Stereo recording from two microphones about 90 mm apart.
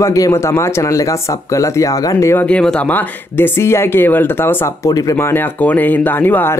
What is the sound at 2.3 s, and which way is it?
Speech, 15° left (ahead or behind).